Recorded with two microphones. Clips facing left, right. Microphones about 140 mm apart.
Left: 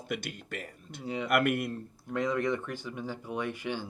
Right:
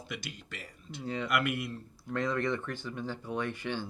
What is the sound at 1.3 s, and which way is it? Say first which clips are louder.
Speech: left 6 dB; 50° left (ahead or behind).